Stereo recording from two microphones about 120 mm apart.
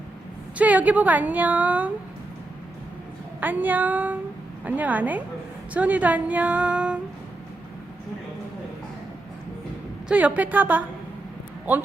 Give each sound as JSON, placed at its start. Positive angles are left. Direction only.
{"t": 0.6, "sound": "a woman's voice", "side_deg": -10}
{"t": 3.4, "sound": "a woman's voice", "side_deg": -15}
{"t": 10.1, "sound": "a woman's voice", "side_deg": -10}